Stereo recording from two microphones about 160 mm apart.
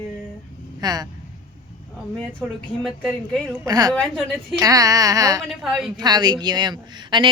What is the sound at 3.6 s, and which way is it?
Speech, 25° right (ahead or behind).